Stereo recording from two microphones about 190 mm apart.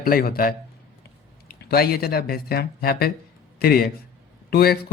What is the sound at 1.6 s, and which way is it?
A man's voice, 55° left (ahead or behind).